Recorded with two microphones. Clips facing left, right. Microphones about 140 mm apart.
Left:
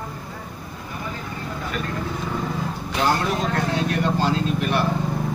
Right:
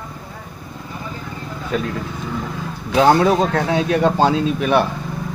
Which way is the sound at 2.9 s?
90° right.